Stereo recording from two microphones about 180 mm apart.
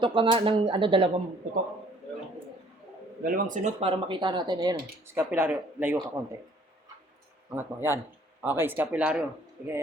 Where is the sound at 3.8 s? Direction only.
30° right (ahead or behind).